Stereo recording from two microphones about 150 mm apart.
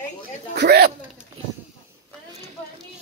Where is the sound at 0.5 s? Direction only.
90° right.